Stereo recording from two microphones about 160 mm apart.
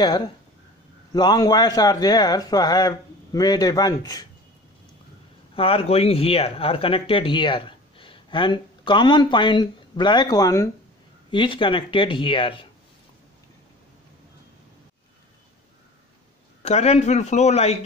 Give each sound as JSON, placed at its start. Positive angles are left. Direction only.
{"t": 1.1, "sound": "speech", "side_deg": 25}
{"t": 5.6, "sound": "speech", "side_deg": 35}
{"t": 16.6, "sound": "speech", "side_deg": 40}